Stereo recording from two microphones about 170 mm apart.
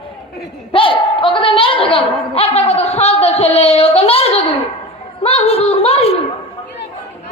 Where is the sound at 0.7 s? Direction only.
30° left (ahead or behind).